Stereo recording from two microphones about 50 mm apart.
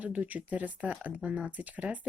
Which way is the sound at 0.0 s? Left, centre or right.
Right.